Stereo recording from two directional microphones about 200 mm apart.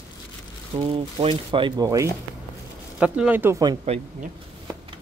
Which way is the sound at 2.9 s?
5° right (ahead or behind).